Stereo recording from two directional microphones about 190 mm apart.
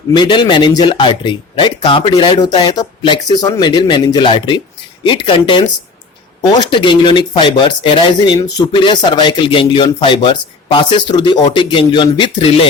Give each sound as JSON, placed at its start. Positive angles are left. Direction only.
{"t": 0.2, "sound": "speech", "side_deg": 25}